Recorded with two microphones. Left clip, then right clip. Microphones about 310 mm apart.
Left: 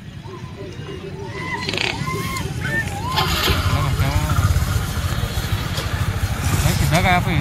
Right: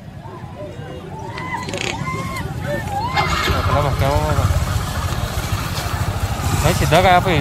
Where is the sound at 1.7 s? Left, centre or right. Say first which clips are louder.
Left 5 dB; centre.